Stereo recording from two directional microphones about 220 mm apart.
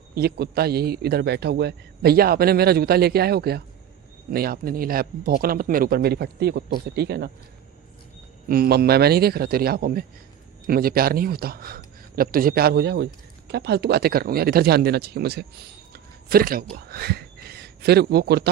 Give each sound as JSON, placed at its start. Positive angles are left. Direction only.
{"t": 0.1, "sound": "a man's voice", "side_deg": -45}
{"t": 8.4, "sound": "a man's voice", "side_deg": -45}